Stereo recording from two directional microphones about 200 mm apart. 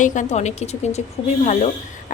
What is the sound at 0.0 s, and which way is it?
A woman's voice, 40° left (ahead or behind).